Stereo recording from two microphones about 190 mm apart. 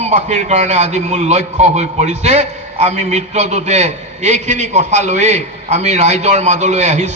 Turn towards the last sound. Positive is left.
turn(degrees=-35)  # may be behind; listen again after turning